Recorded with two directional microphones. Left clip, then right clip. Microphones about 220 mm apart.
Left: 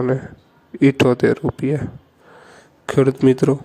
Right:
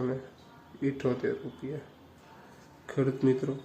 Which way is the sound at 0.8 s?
45° left (ahead or behind).